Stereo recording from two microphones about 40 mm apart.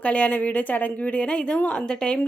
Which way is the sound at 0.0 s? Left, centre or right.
Left.